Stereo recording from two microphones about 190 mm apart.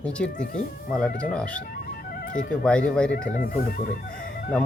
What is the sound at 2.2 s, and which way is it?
Music, 45° left (ahead or behind).